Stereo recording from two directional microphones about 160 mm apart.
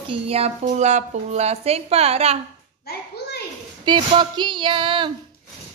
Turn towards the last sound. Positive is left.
turn(degrees=-30)  # may be behind; listen again after turning